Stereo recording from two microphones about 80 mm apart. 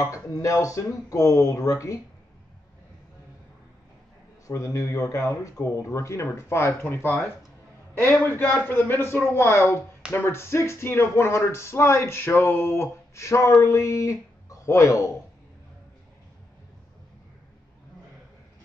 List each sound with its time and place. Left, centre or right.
0.0 s speech: left
4.5 s speech: left